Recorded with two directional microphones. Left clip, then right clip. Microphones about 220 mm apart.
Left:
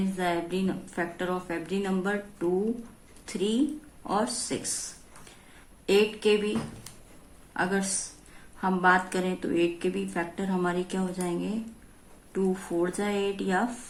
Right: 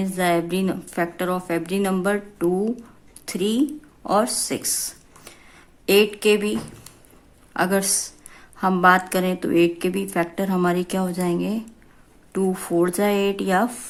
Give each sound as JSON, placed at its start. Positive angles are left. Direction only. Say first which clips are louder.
{"t": 0.0, "sound": "a woman's voice", "louder": "right 8 dB", "side_deg": -45}
{"t": 5.8, "sound": "a woman's voice", "louder": "right 6 dB", "side_deg": -45}
{"t": 7.5, "sound": "a woman's voice", "louder": "right 7 dB", "side_deg": -45}